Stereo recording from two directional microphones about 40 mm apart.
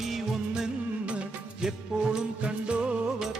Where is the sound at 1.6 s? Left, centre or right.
Centre.